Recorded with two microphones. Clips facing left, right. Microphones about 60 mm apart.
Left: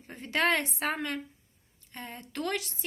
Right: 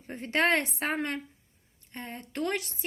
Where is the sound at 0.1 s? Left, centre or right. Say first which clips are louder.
Right 2 dB; right.